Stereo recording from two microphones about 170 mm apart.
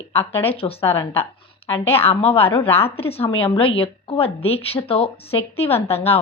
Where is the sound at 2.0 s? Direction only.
35° left (ahead or behind).